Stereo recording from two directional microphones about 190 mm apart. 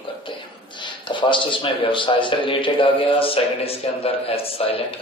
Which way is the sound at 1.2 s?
25° left (ahead or behind).